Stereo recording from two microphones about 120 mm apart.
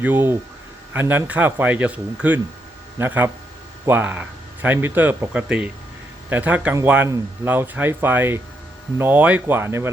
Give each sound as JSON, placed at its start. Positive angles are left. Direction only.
{"t": 0.0, "sound": "a man's voice", "side_deg": -15}